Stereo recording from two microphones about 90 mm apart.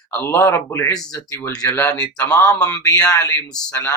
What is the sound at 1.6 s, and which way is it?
Speech, 25° left (ahead or behind).